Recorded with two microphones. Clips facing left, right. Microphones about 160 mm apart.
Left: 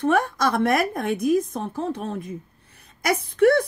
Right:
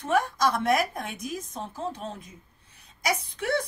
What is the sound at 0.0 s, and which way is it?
A woman's voice, 60° left (ahead or behind).